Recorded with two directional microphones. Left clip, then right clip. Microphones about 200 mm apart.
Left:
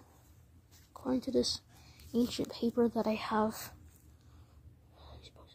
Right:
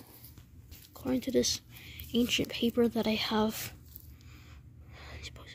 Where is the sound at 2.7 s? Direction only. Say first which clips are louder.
Right 1 dB; 30° right (ahead or behind).